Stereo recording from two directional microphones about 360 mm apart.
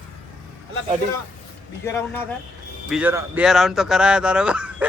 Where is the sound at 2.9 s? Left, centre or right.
Centre.